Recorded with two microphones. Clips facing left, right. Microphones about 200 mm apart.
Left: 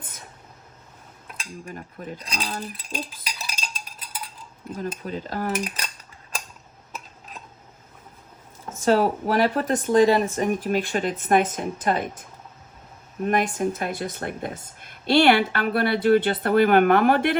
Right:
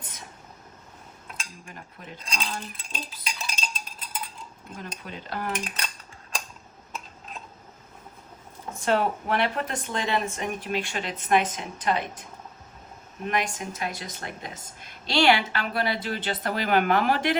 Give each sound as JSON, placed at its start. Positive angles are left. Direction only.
{"t": 1.6, "sound": "cutlery", "side_deg": 40}
{"t": 3.2, "sound": "cutlery", "side_deg": 5}
{"t": 5.0, "sound": "cutlery", "side_deg": 40}
{"t": 8.7, "sound": "cutlery", "side_deg": 40}
{"t": 10.3, "sound": "speech", "side_deg": 45}
{"t": 13.2, "sound": "speech", "side_deg": 50}